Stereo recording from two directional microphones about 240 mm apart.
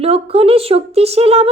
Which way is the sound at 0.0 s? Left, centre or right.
Right.